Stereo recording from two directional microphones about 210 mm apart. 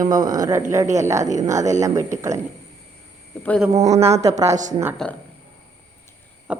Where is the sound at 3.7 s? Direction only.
30° right (ahead or behind).